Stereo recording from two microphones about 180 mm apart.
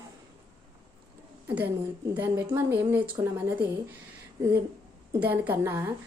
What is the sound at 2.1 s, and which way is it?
Speech, 10° right (ahead or behind).